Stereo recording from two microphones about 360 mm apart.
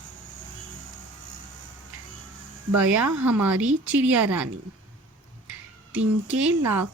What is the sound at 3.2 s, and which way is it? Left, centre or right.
Speech, centre.